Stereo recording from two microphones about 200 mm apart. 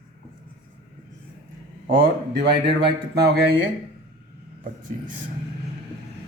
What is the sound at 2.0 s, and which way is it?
Speech, 55° right (ahead or behind).